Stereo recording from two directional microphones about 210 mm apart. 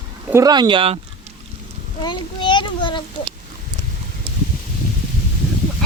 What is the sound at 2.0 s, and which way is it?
A child's voice, 20° left (ahead or behind).